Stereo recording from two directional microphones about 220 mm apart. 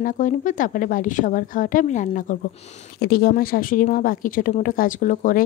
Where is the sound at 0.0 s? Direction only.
35° left (ahead or behind).